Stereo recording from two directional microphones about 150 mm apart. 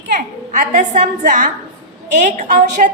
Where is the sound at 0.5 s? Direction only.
60° right (ahead or behind).